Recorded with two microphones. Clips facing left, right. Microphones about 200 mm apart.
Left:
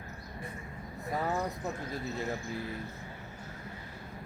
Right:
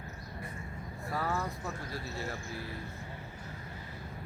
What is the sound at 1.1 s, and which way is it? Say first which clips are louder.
Speech: left 2 dB; 20° left (ahead or behind).